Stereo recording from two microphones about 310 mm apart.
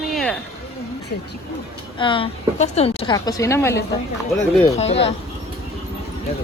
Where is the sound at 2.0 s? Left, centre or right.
Centre.